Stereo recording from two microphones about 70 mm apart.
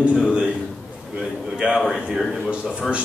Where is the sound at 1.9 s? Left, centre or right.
Centre.